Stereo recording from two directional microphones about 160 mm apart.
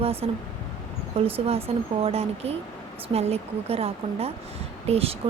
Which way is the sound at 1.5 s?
40° right (ahead or behind).